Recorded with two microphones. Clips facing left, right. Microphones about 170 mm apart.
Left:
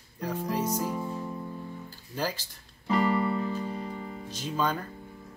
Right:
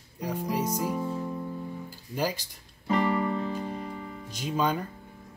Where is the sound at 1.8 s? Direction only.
10° right (ahead or behind).